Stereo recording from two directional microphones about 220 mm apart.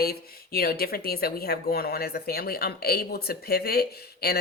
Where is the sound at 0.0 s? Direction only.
45° left (ahead or behind).